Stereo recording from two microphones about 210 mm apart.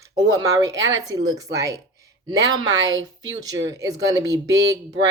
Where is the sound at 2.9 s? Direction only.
60° right (ahead or behind).